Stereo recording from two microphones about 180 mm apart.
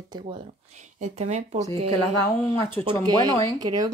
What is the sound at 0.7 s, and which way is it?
Speech, 40° right (ahead or behind).